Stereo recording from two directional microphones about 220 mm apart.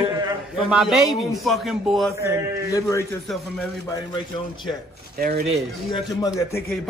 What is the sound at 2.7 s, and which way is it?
Speech, 10° left (ahead or behind).